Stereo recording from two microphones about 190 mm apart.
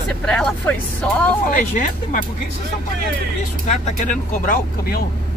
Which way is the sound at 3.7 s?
40° left (ahead or behind).